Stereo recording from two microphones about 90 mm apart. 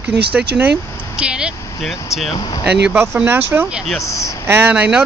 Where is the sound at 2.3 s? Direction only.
50° left (ahead or behind).